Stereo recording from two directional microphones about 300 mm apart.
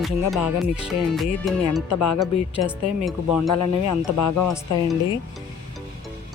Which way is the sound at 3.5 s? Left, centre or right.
Left.